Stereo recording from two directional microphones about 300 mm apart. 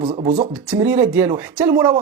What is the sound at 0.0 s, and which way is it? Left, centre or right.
Speech, centre.